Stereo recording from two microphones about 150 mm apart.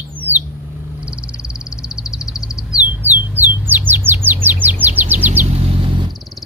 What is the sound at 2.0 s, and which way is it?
Bird, 5° right (ahead or behind).